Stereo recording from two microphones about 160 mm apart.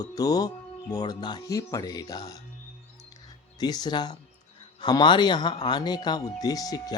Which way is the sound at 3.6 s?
25° left (ahead or behind).